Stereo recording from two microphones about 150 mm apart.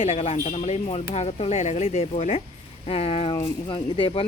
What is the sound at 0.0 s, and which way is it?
Speech, 45° left (ahead or behind).